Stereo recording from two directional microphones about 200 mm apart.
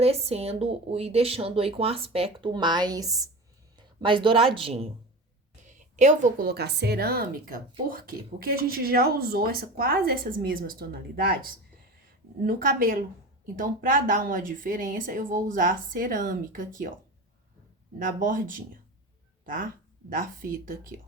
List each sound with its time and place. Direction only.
0.0 s speech: 30° right (ahead or behind)
5.6 s a sound: 35° right (ahead or behind)
6.5 s speech: 55° right (ahead or behind)
12.5 s speech: 45° right (ahead or behind)
18.0 s speech: 40° right (ahead or behind)